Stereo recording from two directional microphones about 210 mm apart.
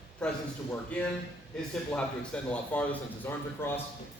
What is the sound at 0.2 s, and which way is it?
A man's voice, 5° left (ahead or behind).